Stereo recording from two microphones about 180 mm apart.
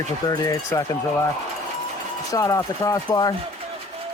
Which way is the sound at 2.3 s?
20° left (ahead or behind).